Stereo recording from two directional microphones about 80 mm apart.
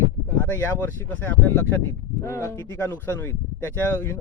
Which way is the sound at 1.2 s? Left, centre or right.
Left.